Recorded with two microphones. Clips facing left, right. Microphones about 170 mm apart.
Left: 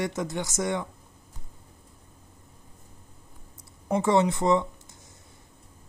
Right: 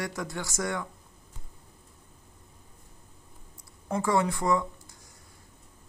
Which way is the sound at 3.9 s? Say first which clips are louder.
Left 4 dB; 20° left (ahead or behind).